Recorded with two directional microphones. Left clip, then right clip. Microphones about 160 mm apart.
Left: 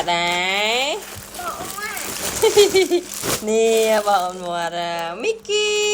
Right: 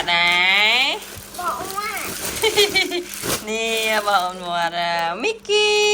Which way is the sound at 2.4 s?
30° left (ahead or behind).